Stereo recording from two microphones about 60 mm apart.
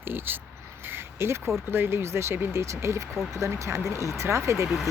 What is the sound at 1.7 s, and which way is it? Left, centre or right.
Speech, right.